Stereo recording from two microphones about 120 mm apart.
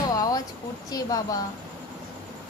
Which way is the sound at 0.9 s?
30° left (ahead or behind).